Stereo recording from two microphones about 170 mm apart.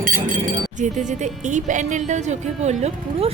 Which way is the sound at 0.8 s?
45° right (ahead or behind).